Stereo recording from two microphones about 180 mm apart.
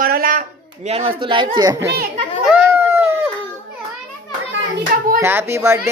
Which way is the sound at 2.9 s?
15° right (ahead or behind).